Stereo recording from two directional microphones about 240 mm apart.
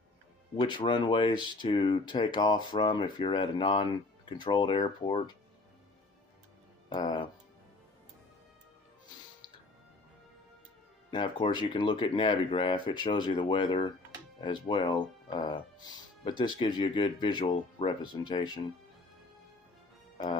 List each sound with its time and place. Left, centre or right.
0.6 s speech: centre
6.9 s speech: centre
11.1 s speech: left